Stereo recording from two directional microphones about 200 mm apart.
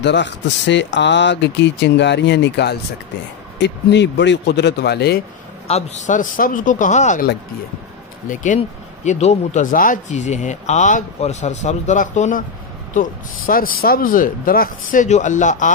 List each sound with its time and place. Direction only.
0.0 s speech: 60° left (ahead or behind)
5.7 s speech: 35° left (ahead or behind)
8.3 s speech: 40° left (ahead or behind)